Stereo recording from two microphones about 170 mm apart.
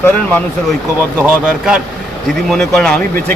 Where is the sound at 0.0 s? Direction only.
10° left (ahead or behind).